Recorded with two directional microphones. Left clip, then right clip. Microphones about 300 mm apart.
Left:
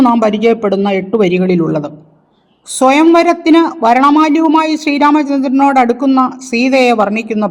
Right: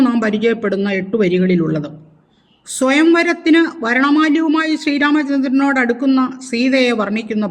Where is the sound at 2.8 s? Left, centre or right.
Centre.